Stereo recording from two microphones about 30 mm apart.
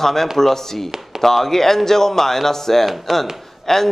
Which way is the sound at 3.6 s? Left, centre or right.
Centre.